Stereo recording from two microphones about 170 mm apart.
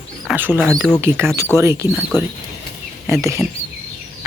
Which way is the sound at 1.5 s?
15° right (ahead or behind).